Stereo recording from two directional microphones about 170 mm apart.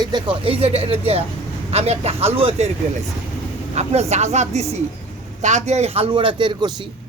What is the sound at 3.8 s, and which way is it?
Speech, 40° right (ahead or behind).